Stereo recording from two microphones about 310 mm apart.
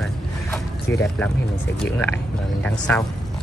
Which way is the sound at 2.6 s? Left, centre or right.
Centre.